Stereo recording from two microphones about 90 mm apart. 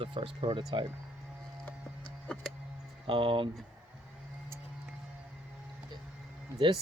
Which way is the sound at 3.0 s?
70° right (ahead or behind).